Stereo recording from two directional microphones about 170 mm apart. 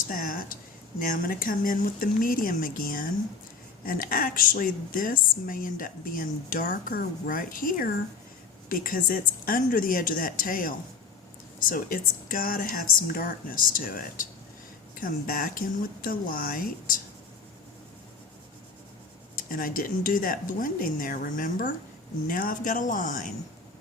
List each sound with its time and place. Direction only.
0.1 s speech: 55° left (ahead or behind)
19.5 s speech: 55° left (ahead or behind)